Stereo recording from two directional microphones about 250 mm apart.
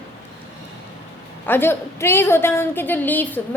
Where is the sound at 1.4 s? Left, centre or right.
Centre.